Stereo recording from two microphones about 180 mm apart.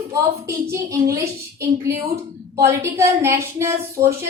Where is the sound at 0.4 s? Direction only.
15° right (ahead or behind).